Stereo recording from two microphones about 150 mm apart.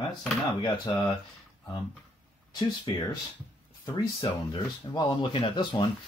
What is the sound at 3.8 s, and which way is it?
Speech, 30° left (ahead or behind).